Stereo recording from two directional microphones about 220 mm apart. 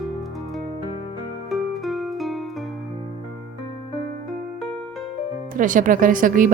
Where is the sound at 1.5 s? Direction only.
Centre (ahead or behind).